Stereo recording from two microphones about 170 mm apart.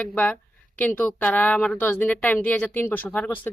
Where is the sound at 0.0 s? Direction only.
10° left (ahead or behind).